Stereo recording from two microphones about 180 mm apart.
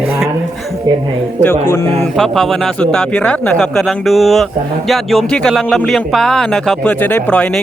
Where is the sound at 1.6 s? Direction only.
15° left (ahead or behind).